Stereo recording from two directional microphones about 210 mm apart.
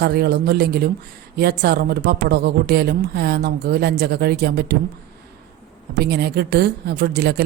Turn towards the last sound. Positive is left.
turn(degrees=-50)  # may be behind; listen again after turning